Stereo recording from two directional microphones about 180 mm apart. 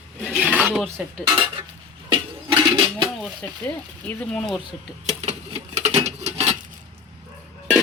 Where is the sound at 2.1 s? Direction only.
30° right (ahead or behind).